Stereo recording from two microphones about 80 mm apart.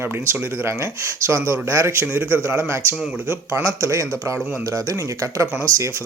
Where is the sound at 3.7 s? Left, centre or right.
Right.